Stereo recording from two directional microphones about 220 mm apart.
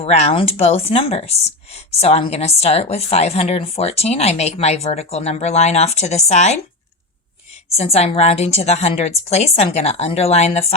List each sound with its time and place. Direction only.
0.0 s speech: 30° left (ahead or behind)
7.8 s speech: 30° left (ahead or behind)